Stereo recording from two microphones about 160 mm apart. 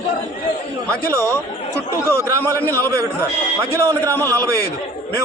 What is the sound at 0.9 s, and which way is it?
A man's voice, 20° right (ahead or behind).